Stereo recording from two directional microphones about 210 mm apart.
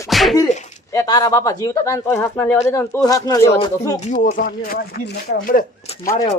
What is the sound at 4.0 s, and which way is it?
Speech, 35° left (ahead or behind).